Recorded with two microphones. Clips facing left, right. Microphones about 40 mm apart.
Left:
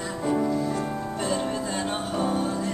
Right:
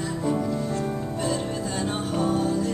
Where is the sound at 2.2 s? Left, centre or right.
Centre.